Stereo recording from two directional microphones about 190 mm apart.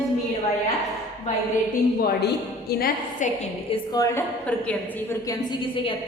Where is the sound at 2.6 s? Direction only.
50° left (ahead or behind).